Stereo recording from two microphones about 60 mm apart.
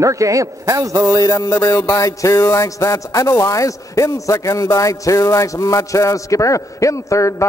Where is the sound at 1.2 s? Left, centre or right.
Left.